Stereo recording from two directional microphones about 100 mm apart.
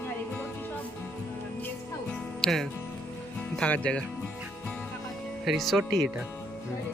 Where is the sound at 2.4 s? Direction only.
5° left (ahead or behind).